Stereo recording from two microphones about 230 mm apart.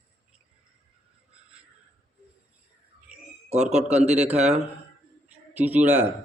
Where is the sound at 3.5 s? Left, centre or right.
Right.